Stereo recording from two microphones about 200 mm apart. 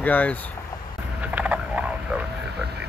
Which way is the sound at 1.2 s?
5° right (ahead or behind).